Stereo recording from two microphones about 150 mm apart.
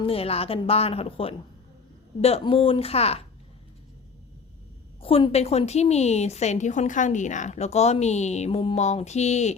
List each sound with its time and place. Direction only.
0.0 s a woman's voice: 40° left (ahead or behind)
4.9 s a woman's voice: 40° left (ahead or behind)